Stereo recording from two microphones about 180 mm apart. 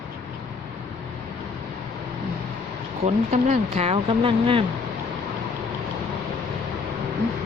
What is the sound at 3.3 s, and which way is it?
Speech, 40° right (ahead or behind).